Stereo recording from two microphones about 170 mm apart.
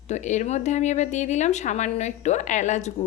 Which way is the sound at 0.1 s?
45° left (ahead or behind).